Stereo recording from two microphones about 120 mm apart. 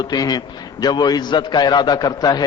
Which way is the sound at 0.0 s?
35° left (ahead or behind).